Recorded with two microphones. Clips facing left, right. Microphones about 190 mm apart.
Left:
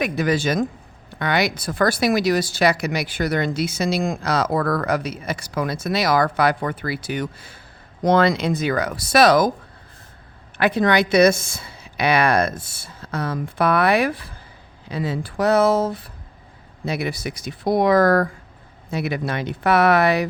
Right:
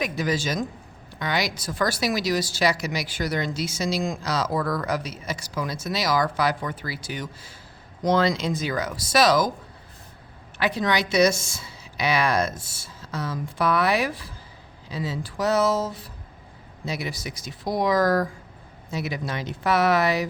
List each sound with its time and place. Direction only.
0.0 s speech: 60° left (ahead or behind)
10.6 s speech: 55° left (ahead or behind)